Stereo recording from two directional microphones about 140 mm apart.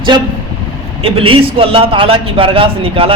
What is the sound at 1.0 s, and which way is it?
A man's voice, 40° right (ahead or behind).